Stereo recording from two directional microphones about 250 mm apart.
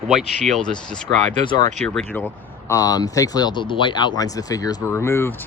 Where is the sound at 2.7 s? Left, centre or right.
Centre.